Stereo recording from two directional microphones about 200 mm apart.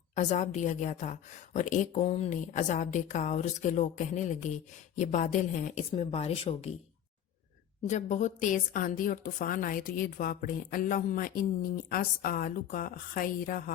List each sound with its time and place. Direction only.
0.2 s a woman's voice: 35° left (ahead or behind)
7.9 s a woman's voice: 35° left (ahead or behind)